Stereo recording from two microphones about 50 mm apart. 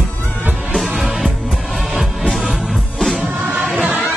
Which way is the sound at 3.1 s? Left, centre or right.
Centre.